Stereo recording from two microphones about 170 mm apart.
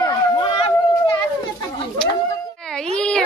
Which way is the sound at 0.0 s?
30° left (ahead or behind).